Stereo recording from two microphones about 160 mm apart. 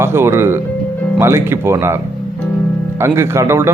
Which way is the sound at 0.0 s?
15° right (ahead or behind).